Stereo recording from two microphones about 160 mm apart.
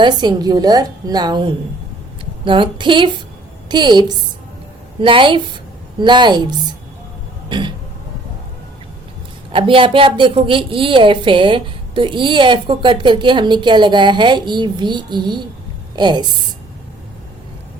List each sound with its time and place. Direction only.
0.0 s a woman's voice: 25° right (ahead or behind)
9.5 s a woman's voice: 35° right (ahead or behind)